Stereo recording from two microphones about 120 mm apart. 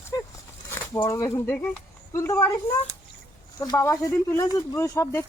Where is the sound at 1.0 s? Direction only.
20° left (ahead or behind).